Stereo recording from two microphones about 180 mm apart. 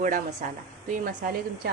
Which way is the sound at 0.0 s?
45° right (ahead or behind).